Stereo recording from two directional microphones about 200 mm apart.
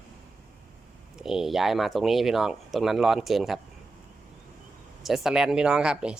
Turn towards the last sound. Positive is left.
turn(degrees=-5)  # may be behind; listen again after turning